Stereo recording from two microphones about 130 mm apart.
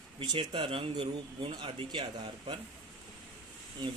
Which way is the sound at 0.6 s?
45° right (ahead or behind).